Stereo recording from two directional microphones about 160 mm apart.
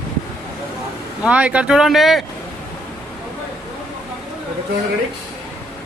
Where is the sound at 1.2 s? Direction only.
10° right (ahead or behind).